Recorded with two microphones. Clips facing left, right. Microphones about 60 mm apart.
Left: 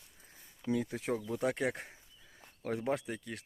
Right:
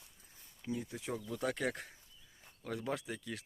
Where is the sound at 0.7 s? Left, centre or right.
Left.